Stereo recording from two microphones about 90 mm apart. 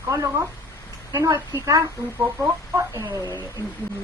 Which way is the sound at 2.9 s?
45° right (ahead or behind).